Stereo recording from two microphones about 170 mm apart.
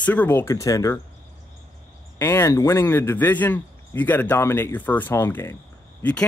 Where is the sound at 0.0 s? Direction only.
10° left (ahead or behind).